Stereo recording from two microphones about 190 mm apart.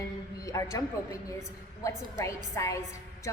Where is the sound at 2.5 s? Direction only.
15° left (ahead or behind).